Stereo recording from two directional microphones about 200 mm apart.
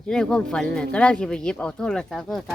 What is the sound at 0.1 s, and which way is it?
Speech, 5° left (ahead or behind).